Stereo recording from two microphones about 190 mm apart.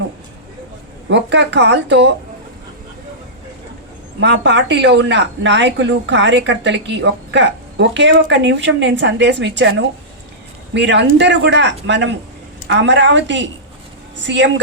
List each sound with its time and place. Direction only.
1.1 s speech: 65° right (ahead or behind)
4.2 s speech: 65° right (ahead or behind)